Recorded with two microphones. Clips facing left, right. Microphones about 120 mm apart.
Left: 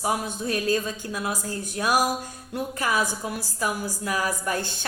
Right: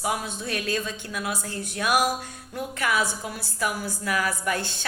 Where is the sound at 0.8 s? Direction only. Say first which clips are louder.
Left 2 dB; 30° left (ahead or behind).